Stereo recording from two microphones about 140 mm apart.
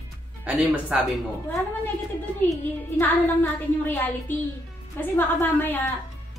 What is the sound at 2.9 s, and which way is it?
Speech, 15° left (ahead or behind).